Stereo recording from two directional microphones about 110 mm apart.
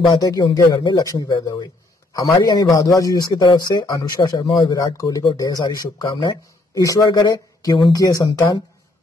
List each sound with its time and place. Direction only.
0.1 s speech: 35° left (ahead or behind)